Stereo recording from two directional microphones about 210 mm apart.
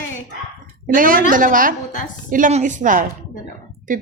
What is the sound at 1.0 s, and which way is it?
A woman's voice, 40° right (ahead or behind).